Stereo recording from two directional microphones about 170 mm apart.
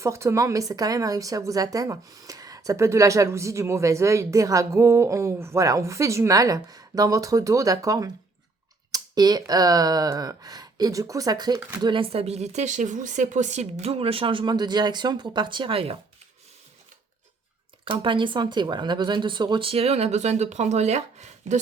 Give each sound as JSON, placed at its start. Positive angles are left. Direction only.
{"t": 0.0, "sound": "speech", "side_deg": -15}
{"t": 17.8, "sound": "speech", "side_deg": -30}